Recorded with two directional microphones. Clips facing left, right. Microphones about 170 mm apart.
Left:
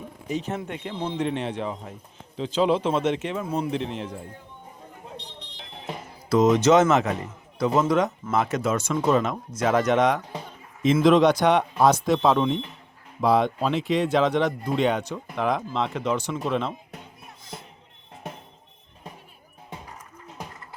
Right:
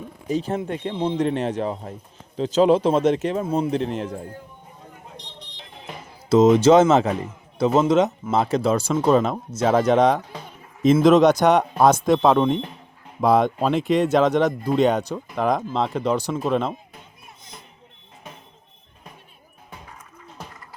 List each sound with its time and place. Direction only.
0.3 s speech: 35° right (ahead or behind)
6.2 s speech: 25° right (ahead or behind)
11.0 s speech: 45° right (ahead or behind)